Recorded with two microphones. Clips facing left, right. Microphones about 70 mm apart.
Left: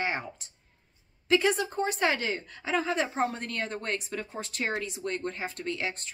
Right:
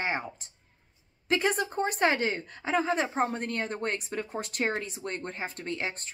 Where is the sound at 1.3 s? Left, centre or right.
Right.